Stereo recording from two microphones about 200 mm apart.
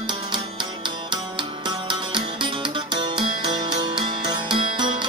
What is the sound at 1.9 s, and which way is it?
Music, 25° right (ahead or behind).